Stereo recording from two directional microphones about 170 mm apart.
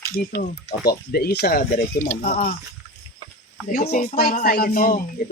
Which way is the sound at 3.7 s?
55° left (ahead or behind).